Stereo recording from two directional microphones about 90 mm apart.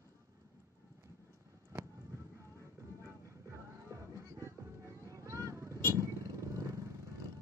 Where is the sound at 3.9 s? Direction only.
35° right (ahead or behind).